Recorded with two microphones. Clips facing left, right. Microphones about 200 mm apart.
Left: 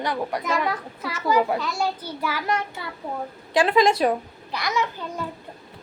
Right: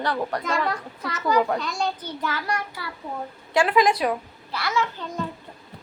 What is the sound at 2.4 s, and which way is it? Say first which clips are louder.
A woman's voice: left 3 dB; 20° left (ahead or behind).